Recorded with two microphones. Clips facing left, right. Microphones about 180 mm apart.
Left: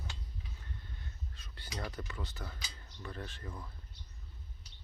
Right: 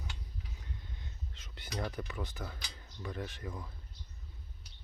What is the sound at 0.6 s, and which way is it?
Cutlery, 15° right (ahead or behind).